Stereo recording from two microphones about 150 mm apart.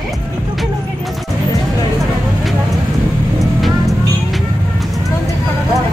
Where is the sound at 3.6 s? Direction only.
Centre (ahead or behind).